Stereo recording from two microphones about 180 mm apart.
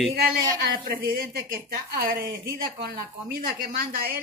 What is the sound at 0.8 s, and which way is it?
Speech, 55° right (ahead or behind).